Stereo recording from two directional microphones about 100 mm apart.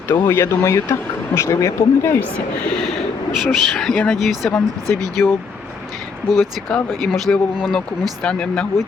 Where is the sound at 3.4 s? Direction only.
Centre (ahead or behind).